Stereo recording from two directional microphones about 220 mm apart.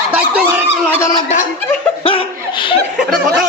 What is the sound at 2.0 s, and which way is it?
Laughter, 25° left (ahead or behind).